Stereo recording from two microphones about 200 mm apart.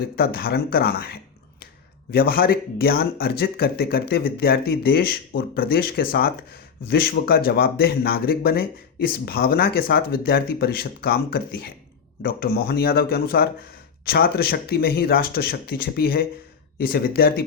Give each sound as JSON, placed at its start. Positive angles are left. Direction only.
{"t": 0.2, "sound": "speech", "side_deg": 50}